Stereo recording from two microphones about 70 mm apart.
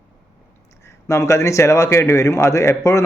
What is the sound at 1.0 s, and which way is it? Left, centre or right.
A man's voice, left.